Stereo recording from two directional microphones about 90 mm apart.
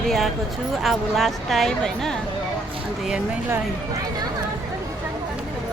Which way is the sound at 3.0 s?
10° right (ahead or behind).